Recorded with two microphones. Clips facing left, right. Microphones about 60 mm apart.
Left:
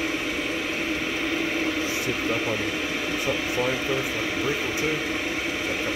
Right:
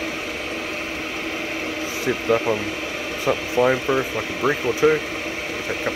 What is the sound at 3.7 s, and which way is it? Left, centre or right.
Speech, right.